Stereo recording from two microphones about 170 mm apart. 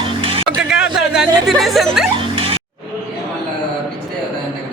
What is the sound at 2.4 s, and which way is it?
Music, 35° right (ahead or behind).